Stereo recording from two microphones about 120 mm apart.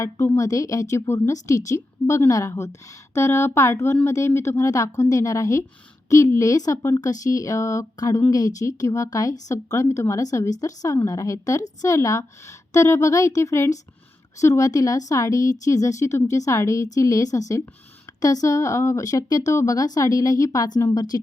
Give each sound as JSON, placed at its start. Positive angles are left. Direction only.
{"t": 0.0, "sound": "a woman's voice", "side_deg": 25}